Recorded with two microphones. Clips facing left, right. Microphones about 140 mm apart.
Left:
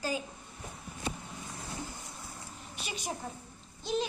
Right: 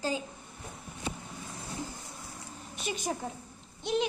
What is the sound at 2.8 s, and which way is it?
Speech, 45° right (ahead or behind).